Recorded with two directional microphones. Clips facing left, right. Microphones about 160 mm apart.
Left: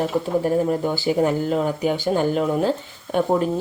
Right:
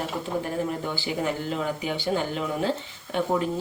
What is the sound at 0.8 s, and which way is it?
A woman's voice, 40° left (ahead or behind).